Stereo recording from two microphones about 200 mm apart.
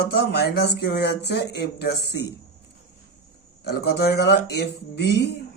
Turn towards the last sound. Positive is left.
turn(degrees=55)  # may be behind; listen again after turning